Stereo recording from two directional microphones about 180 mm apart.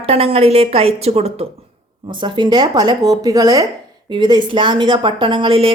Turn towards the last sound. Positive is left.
turn(degrees=-30)  # may be behind; listen again after turning